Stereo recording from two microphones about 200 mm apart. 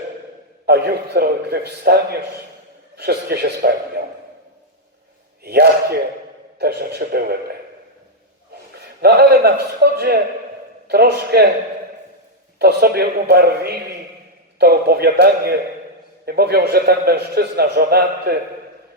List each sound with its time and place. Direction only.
0.6 s a man's voice: 55° right (ahead or behind)
5.4 s a man's voice: 50° right (ahead or behind)
9.0 s a man's voice: 50° right (ahead or behind)
12.5 s a man's voice: 50° right (ahead or behind)